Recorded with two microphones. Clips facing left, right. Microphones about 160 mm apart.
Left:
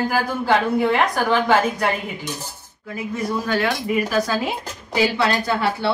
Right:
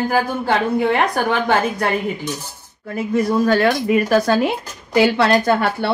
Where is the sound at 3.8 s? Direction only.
65° right (ahead or behind).